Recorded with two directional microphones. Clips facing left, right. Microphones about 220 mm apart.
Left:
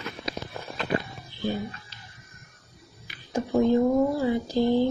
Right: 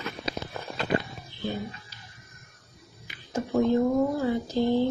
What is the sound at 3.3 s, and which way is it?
Speech, 15° left (ahead or behind).